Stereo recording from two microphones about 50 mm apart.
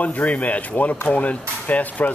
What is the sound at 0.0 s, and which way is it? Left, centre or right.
Speech, left.